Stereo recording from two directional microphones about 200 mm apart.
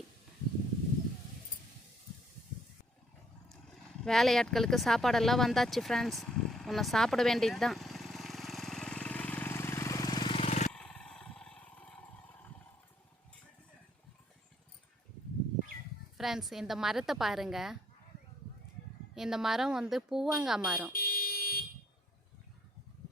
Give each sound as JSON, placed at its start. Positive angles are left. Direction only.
{"t": 4.0, "sound": "a sound", "side_deg": 0}
{"t": 10.7, "sound": "roar", "side_deg": 5}
{"t": 16.1, "sound": "speech", "side_deg": 0}
{"t": 19.1, "sound": "speech", "side_deg": 0}
{"t": 20.9, "sound": "car alarm", "side_deg": 45}